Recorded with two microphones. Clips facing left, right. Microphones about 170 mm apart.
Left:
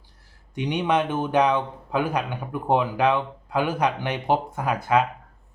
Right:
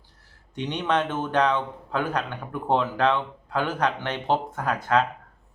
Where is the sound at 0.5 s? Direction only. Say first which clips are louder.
Left 2 dB; 10° left (ahead or behind).